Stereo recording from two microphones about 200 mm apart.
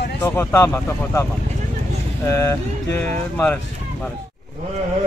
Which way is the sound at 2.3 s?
15° left (ahead or behind).